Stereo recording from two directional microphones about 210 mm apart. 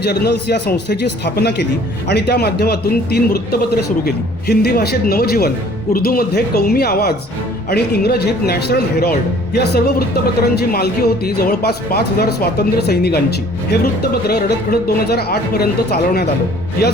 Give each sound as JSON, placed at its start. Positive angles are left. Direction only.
{"t": 0.0, "sound": "speech", "side_deg": 50}